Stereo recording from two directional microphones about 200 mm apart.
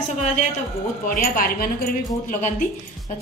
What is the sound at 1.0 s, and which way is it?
Speech, 45° left (ahead or behind).